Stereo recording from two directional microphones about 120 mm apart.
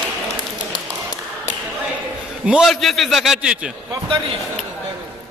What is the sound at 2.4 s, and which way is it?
A man's voice, 5° right (ahead or behind).